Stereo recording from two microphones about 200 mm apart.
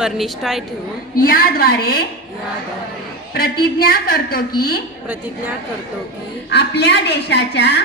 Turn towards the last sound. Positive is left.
turn(degrees=55)  # may be behind; listen again after turning